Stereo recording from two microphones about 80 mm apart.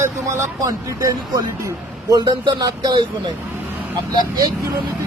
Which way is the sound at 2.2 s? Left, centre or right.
Right.